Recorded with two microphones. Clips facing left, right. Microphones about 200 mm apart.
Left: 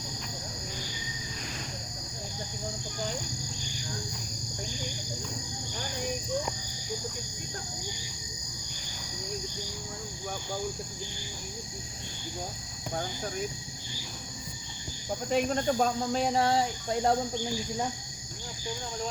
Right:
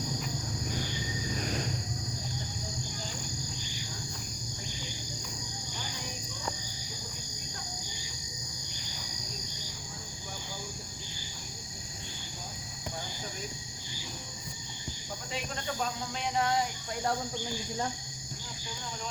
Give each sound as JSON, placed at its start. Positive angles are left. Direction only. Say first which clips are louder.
{"t": 15.3, "sound": "speech", "louder": "left 11 dB", "side_deg": 45}